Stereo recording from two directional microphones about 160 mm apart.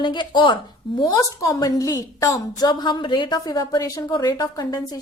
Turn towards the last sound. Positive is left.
turn(degrees=25)  # may be behind; listen again after turning